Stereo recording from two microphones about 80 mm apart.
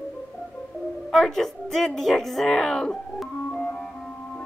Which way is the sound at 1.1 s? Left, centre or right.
Centre.